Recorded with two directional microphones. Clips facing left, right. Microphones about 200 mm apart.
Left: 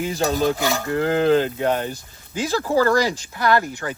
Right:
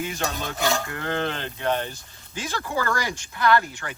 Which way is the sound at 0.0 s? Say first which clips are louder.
Left 9 dB; 35° left (ahead or behind).